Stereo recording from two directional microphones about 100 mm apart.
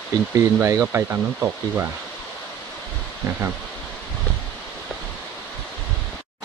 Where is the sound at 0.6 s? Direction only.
25° right (ahead or behind).